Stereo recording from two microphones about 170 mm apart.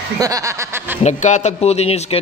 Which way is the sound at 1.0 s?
45° left (ahead or behind).